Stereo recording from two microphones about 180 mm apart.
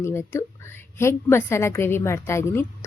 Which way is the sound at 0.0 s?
15° left (ahead or behind).